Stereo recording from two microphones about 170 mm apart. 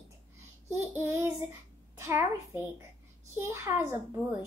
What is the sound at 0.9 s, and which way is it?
A woman's voice, 15° right (ahead or behind).